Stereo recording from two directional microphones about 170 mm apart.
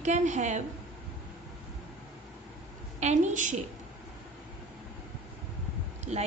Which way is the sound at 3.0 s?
40° right (ahead or behind).